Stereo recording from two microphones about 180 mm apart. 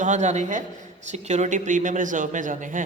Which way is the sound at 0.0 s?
40° right (ahead or behind).